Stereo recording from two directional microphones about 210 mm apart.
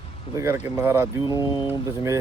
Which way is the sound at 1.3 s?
20° left (ahead or behind).